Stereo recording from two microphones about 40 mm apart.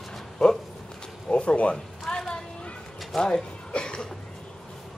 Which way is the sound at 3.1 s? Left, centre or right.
Centre.